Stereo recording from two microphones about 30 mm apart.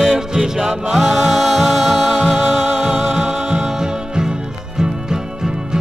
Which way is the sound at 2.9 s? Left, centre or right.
Right.